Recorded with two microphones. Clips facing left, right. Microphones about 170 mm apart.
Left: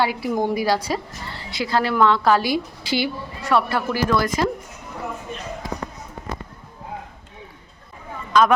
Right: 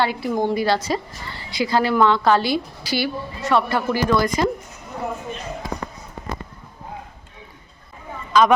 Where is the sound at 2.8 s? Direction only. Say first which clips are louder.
Left 2 dB; 20° left (ahead or behind).